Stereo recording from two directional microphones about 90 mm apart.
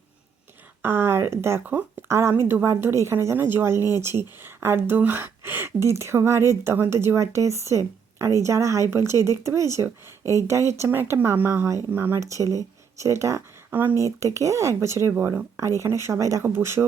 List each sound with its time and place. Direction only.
0.8 s speech: 25° right (ahead or behind)
13.7 s speech: 20° right (ahead or behind)
14.0 s speech: 35° right (ahead or behind)